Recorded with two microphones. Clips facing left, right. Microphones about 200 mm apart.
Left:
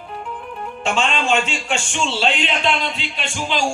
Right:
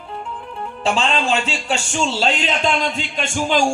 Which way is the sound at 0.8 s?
35° right (ahead or behind).